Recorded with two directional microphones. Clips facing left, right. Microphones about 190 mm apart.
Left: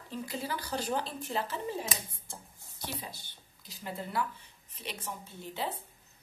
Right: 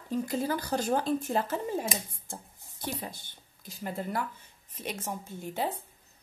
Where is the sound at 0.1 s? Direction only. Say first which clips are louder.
Right 7 dB; 45° right (ahead or behind).